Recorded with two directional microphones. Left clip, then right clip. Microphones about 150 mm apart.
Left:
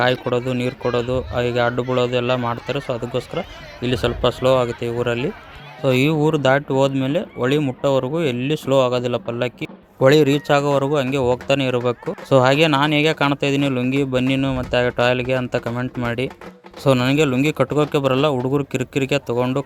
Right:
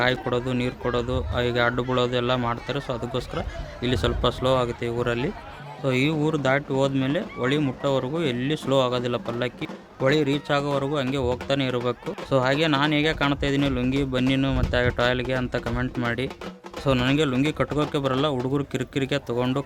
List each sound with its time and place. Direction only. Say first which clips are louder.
0.0 s a man's voice: left 5 dB; 25° left (ahead or behind)
5.8 s a man's voice: left 6 dB; 35° left (ahead or behind)
10.0 s a man's voice: left 8 dB; 40° left (ahead or behind)
15.6 s a man's voice: left 3 dB; 20° left (ahead or behind)